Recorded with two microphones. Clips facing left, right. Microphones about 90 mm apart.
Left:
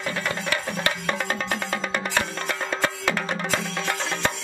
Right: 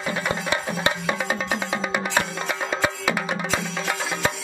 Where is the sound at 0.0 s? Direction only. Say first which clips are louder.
Right 2 dB; 15° right (ahead or behind).